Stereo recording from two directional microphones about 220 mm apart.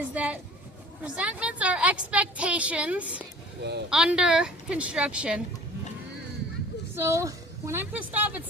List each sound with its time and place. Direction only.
0.0 s a sound: 5° right (ahead or behind)
1.0 s a woman's voice: 5° right (ahead or behind)
3.6 s speech: 50° right (ahead or behind)
3.8 s a woman's voice: 5° right (ahead or behind)
6.9 s a woman's voice: 10° right (ahead or behind)